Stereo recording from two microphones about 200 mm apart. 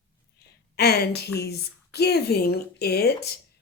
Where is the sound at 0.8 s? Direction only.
55° left (ahead or behind).